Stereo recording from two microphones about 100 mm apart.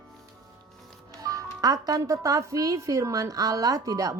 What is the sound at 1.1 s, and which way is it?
Speech, 35° right (ahead or behind).